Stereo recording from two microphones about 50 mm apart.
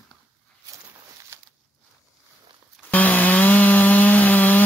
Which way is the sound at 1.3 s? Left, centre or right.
Right.